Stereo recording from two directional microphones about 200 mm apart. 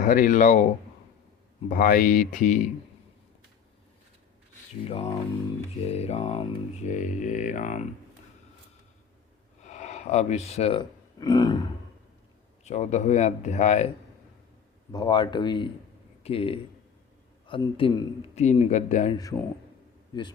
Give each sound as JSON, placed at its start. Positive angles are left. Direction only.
{"t": 0.0, "sound": "speech", "side_deg": 40}
{"t": 1.7, "sound": "speech", "side_deg": 45}
{"t": 4.9, "sound": "speech", "side_deg": 30}
{"t": 6.8, "sound": "speech", "side_deg": 40}
{"t": 9.6, "sound": "speech", "side_deg": 35}
{"t": 12.6, "sound": "speech", "side_deg": 35}
{"t": 14.9, "sound": "speech", "side_deg": 20}
{"t": 19.1, "sound": "speech", "side_deg": 15}